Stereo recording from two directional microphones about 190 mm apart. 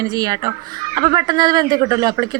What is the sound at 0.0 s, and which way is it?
A woman's voice, 20° right (ahead or behind).